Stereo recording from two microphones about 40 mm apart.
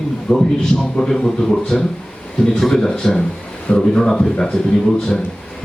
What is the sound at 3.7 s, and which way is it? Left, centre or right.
A man's voice, centre.